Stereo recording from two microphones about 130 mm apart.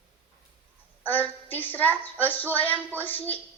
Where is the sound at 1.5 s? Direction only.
15° left (ahead or behind).